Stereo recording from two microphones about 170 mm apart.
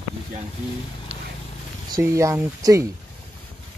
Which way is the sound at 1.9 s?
15° right (ahead or behind).